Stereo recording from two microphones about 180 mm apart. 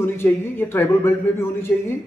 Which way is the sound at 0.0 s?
10° left (ahead or behind).